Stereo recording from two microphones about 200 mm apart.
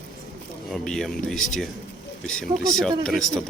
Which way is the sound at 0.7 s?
Centre (ahead or behind).